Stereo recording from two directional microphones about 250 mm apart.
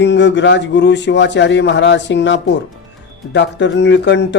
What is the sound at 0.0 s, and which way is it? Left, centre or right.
Speech, left.